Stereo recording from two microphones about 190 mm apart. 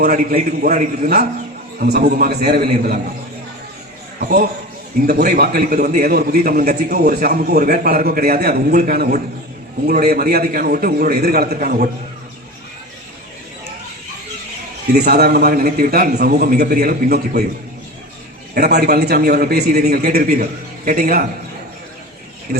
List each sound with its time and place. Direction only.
0.0 s a man's voice: 50° right (ahead or behind)
1.8 s a man's voice: 60° right (ahead or behind)
4.2 s a man's voice: 55° right (ahead or behind)
14.9 s a man's voice: 55° right (ahead or behind)
18.5 s a man's voice: 60° right (ahead or behind)